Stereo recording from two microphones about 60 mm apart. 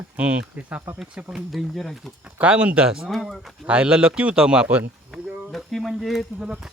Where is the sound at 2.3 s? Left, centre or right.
Right.